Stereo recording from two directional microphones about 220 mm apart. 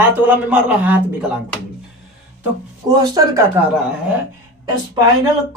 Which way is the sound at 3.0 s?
15° right (ahead or behind).